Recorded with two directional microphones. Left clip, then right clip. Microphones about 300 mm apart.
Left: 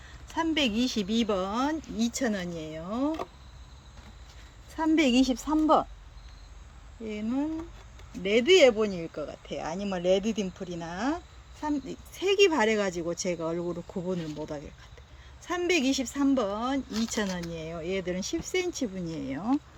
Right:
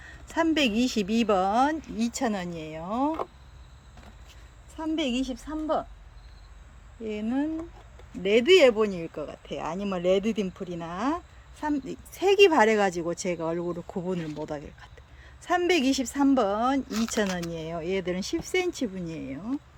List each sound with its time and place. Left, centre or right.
0.0 s speech: centre
4.8 s a woman's voice: centre
7.0 s speech: centre